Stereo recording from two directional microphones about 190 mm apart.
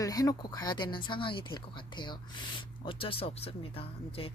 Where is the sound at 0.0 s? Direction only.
20° left (ahead or behind).